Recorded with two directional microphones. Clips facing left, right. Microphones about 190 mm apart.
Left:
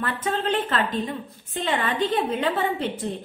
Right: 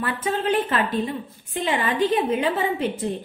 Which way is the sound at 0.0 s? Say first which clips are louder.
Right 1 dB; 10° right (ahead or behind).